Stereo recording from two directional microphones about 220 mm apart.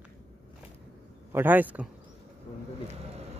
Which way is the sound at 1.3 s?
10° right (ahead or behind).